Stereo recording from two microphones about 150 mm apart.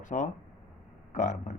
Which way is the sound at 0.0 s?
55° left (ahead or behind).